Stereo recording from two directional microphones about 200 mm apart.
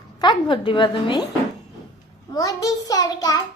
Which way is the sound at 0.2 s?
25° left (ahead or behind).